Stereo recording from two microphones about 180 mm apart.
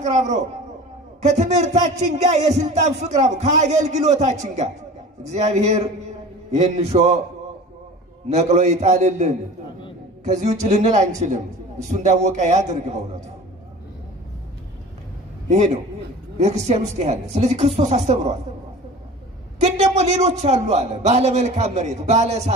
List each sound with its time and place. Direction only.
0.0 s speech: 40° right (ahead or behind)
8.4 s speech: 40° right (ahead or behind)
15.5 s speech: 40° right (ahead or behind)
19.6 s speech: 35° right (ahead or behind)